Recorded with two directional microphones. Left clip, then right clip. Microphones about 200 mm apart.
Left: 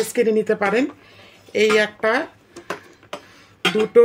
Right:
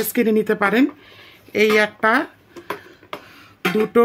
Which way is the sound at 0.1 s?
45° right (ahead or behind).